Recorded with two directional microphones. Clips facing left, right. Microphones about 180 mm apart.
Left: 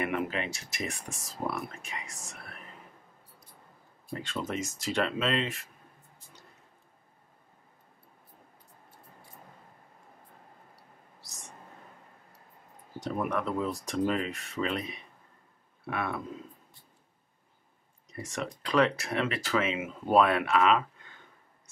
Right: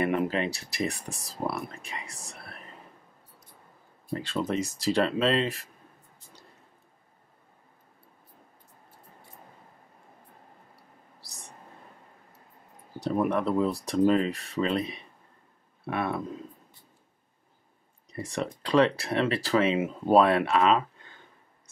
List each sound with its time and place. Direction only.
0.0 s speech: 35° right (ahead or behind)
4.1 s speech: 35° right (ahead or behind)
11.1 s a sound: 35° right (ahead or behind)
13.0 s speech: 30° right (ahead or behind)
18.1 s speech: 30° right (ahead or behind)